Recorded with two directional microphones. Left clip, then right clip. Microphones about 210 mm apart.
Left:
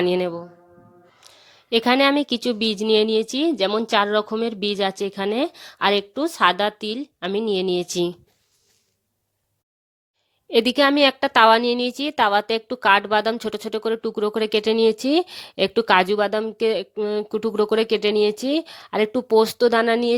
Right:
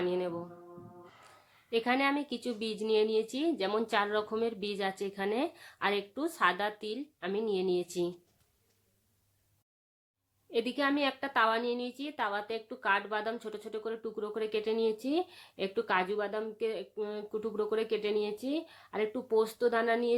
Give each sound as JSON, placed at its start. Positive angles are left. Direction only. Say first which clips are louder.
{"t": 0.0, "sound": "a woman's voice", "louder": "left 12 dB", "side_deg": 45}
{"t": 1.7, "sound": "speech", "louder": "left 12 dB", "side_deg": 45}
{"t": 10.5, "sound": "a woman's voice", "louder": "left 14 dB", "side_deg": 45}